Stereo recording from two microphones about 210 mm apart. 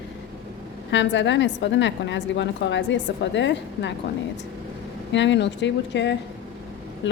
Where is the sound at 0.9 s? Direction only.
60° left (ahead or behind).